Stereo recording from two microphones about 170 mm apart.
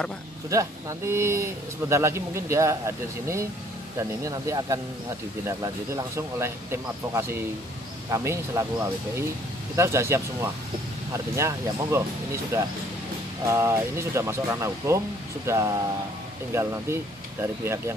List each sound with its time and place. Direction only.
0.5 s a man's voice: 20° right (ahead or behind)
4.2 s a man's voice: 20° right (ahead or behind)